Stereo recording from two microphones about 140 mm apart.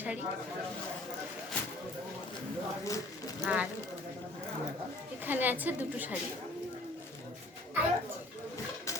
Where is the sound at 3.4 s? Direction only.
10° right (ahead or behind).